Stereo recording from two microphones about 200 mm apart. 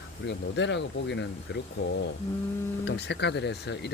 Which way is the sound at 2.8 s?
60° left (ahead or behind).